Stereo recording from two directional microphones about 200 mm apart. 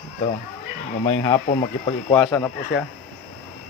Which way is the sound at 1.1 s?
25° left (ahead or behind).